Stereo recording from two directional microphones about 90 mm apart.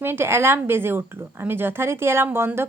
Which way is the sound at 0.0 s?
25° right (ahead or behind).